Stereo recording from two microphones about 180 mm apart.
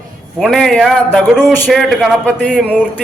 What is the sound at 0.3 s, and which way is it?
A man's voice, centre (ahead or behind).